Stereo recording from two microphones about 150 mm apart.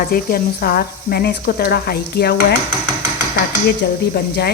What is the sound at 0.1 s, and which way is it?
Speech, 85° left.